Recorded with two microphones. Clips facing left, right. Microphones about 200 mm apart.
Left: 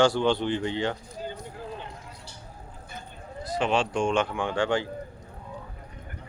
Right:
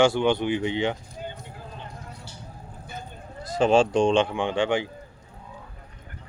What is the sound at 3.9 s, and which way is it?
Speech, 25° right (ahead or behind).